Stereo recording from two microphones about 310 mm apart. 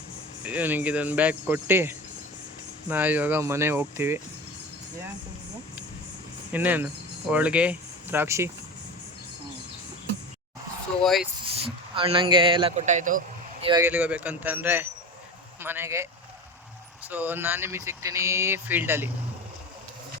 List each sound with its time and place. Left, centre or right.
0.4 s speech: centre
6.5 s speech: centre
11.0 s speech: centre
11.4 s speech: centre